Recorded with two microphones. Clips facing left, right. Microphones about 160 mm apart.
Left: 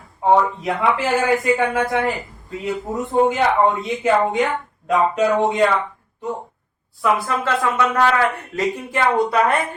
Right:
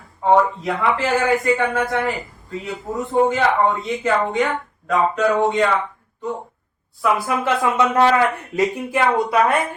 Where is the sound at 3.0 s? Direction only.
20° left (ahead or behind).